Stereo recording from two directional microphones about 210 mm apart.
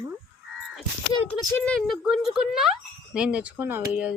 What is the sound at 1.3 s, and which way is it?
Speech, 5° left (ahead or behind).